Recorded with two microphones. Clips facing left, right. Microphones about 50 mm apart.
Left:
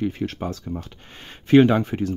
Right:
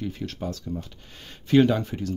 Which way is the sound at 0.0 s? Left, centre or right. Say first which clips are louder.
Left 6 dB; left.